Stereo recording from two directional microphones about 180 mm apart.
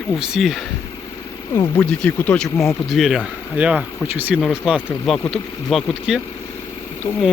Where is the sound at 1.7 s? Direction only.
10° left (ahead or behind).